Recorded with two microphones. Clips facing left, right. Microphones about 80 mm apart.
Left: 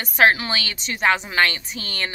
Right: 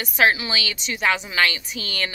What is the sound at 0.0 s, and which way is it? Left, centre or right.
A woman's voice, left.